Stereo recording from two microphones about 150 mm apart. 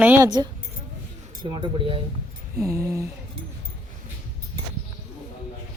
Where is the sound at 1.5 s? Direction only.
35° right (ahead or behind).